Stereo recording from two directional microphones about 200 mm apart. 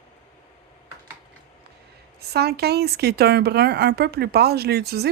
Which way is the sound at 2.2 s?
55° right (ahead or behind).